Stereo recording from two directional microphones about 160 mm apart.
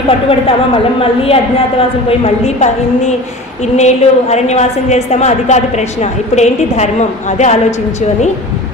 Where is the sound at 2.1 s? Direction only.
45° left (ahead or behind).